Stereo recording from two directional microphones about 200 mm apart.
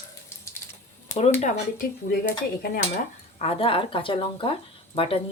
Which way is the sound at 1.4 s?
40° left (ahead or behind).